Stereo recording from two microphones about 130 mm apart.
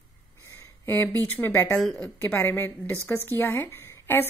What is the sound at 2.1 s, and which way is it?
Speech, 15° left (ahead or behind).